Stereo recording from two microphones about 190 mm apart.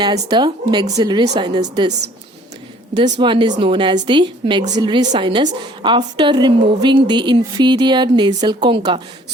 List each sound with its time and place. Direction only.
0.0 s a woman's voice: 20° right (ahead or behind)
2.9 s a woman's voice: 25° right (ahead or behind)